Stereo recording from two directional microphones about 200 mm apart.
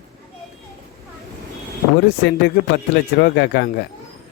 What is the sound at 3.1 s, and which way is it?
Speech, 55° left (ahead or behind).